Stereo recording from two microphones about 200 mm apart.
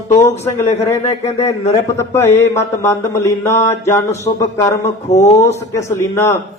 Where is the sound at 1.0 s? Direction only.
30° left (ahead or behind).